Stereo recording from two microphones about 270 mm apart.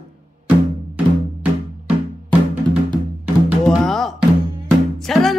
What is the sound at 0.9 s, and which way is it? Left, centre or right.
Music, centre.